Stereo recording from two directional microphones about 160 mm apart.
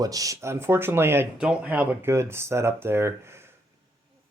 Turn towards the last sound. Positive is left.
turn(degrees=-15)  # may be behind; listen again after turning